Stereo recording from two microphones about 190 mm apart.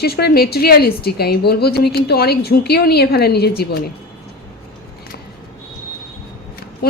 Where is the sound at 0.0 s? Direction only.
55° left (ahead or behind).